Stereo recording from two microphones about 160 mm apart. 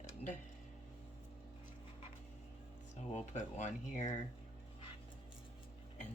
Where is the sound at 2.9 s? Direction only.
45° left (ahead or behind).